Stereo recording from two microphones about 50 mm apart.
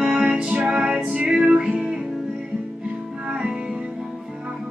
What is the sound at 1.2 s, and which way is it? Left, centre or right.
Music, right.